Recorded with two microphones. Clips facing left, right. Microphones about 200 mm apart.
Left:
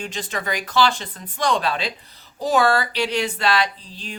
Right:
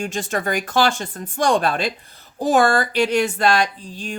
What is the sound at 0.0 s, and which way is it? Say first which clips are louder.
Speech: right 5 dB; 45° right (ahead or behind).